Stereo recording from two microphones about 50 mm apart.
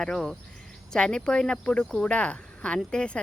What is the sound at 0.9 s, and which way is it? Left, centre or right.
Speech, centre.